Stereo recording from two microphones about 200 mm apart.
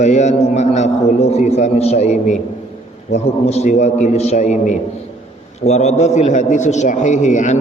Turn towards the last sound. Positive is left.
turn(degrees=35)  # may be behind; listen again after turning